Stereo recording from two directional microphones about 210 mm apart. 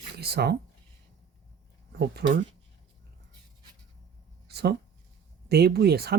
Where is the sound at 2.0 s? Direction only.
50° right (ahead or behind).